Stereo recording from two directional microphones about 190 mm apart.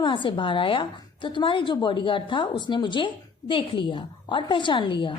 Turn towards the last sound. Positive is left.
turn(degrees=25)  # may be behind; listen again after turning